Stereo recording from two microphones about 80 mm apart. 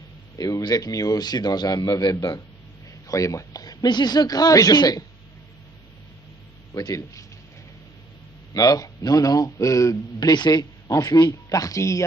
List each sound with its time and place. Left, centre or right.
0.3 s speech: left
3.1 s speech: left
6.7 s speech: left
8.5 s speech: left
10.8 s speech: left